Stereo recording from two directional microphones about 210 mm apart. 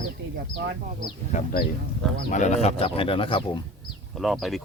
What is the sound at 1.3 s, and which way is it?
Speech, 45° left (ahead or behind).